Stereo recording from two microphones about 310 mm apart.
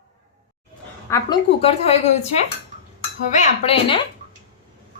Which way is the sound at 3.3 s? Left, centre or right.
Centre.